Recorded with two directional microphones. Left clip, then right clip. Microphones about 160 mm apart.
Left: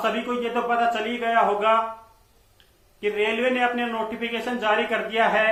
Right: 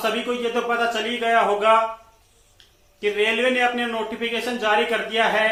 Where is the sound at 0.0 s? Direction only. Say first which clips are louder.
Right 2 dB; 5° right (ahead or behind).